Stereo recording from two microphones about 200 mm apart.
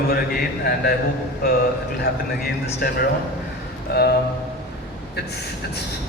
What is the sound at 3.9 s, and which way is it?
Speech, 50° left (ahead or behind).